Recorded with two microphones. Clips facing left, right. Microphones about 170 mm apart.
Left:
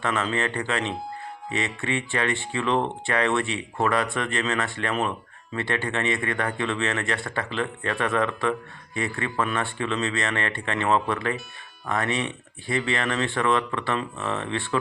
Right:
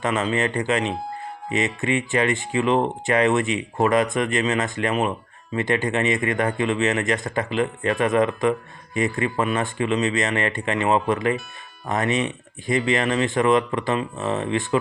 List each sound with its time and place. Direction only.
0.0 s speech: 15° right (ahead or behind)